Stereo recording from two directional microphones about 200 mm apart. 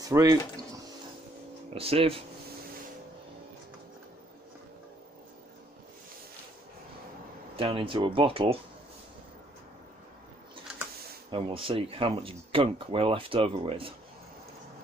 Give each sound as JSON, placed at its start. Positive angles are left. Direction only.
{"t": 0.0, "sound": "speech", "side_deg": -15}
{"t": 1.7, "sound": "speech", "side_deg": -30}
{"t": 7.5, "sound": "speech", "side_deg": -25}
{"t": 11.2, "sound": "speech", "side_deg": -25}